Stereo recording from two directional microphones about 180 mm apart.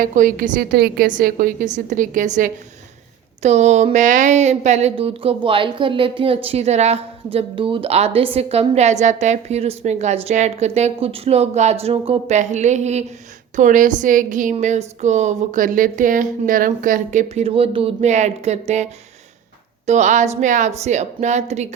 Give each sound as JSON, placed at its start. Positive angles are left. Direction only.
{"t": 0.0, "sound": "a woman's voice", "side_deg": -50}